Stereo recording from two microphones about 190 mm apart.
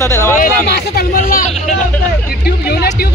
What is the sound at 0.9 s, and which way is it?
Speech, 50° left (ahead or behind).